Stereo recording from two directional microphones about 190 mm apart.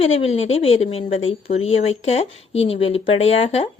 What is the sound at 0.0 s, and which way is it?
Speech, 30° left (ahead or behind).